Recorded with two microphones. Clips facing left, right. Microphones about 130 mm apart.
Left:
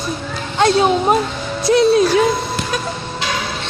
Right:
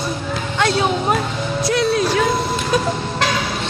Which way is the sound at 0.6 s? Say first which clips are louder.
Left 5 dB; 25° left (ahead or behind).